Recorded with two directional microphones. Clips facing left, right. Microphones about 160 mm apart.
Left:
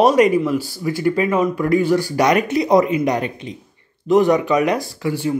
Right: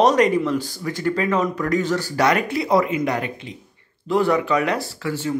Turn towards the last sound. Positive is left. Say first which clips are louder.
# left 4 dB
turn(degrees=15)  # may be behind; listen again after turning